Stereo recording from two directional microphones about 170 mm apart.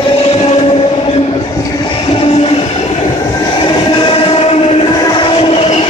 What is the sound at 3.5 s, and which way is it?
Train, 30° left (ahead or behind).